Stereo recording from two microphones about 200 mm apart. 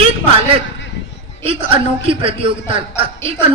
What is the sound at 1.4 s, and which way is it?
A man's voice, 25° right (ahead or behind).